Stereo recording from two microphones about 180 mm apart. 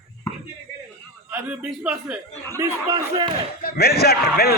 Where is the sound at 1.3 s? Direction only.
5° right (ahead or behind).